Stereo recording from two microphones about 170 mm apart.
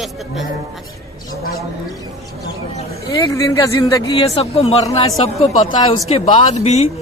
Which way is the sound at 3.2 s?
20° left (ahead or behind).